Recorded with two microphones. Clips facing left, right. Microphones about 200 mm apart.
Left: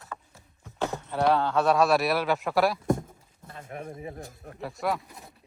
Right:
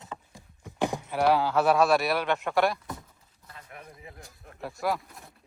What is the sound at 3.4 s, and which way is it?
Pigeon, 50° left (ahead or behind).